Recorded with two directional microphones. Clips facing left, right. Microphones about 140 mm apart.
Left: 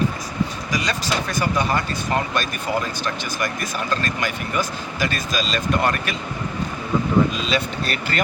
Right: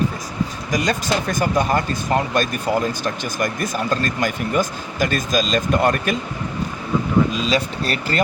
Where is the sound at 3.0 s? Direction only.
45° right (ahead or behind).